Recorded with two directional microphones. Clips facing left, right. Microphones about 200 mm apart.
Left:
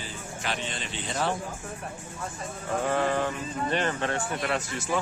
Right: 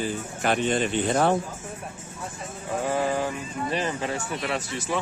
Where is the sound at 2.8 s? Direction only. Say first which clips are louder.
Right 1 dB; 10° right (ahead or behind).